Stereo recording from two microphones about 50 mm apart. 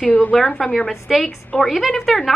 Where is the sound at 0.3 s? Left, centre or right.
Centre.